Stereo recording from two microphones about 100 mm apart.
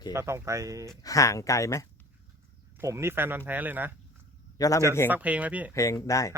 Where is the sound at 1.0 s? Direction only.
35° left (ahead or behind).